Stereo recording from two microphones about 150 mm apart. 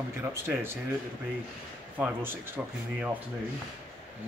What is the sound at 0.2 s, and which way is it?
Speech, 15° right (ahead or behind).